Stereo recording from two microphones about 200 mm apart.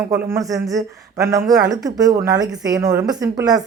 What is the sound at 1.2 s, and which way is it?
A woman's voice, 15° right (ahead or behind).